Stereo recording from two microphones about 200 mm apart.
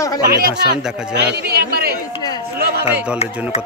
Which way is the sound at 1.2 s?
55° right (ahead or behind).